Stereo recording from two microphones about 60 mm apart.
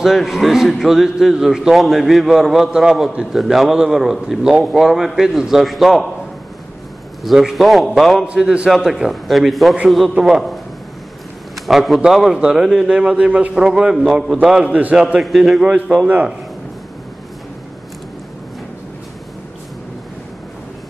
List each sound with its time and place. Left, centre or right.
0.0 s a man's voice: centre
7.2 s a man's voice: centre
11.6 s a man's voice: centre
12.8 s a man's voice: centre
14.7 s a man's voice: right
15.1 s a man's voice: centre